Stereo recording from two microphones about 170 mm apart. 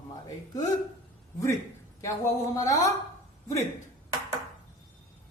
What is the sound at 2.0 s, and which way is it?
Speech, 20° left (ahead or behind).